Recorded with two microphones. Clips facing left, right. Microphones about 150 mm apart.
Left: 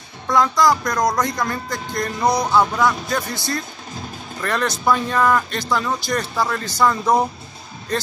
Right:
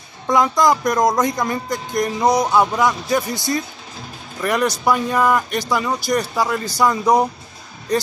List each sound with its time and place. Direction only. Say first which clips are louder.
0.3 s speech: right 1 dB; 20° right (ahead or behind)